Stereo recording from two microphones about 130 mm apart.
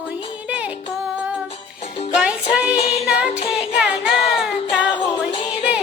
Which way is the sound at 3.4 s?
5° right (ahead or behind).